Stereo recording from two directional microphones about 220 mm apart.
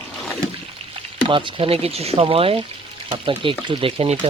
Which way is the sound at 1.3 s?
20° right (ahead or behind).